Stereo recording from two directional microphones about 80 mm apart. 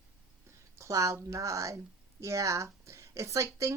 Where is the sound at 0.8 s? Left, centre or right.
Right.